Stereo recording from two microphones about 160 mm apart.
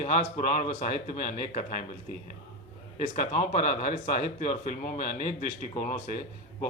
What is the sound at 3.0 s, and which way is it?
Speech, 50° left (ahead or behind).